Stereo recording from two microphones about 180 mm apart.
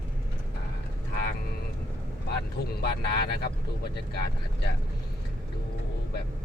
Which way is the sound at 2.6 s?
60° left (ahead or behind).